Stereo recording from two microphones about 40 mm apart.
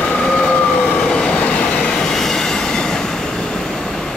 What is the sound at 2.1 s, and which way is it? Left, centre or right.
Train, centre.